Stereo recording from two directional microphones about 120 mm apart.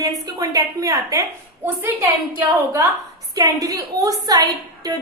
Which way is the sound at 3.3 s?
30° right (ahead or behind).